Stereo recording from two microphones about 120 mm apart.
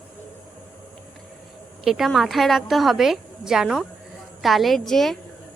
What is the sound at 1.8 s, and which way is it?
A woman's voice, 5° right (ahead or behind).